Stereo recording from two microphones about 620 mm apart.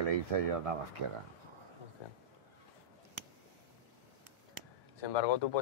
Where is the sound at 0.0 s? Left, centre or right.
Right.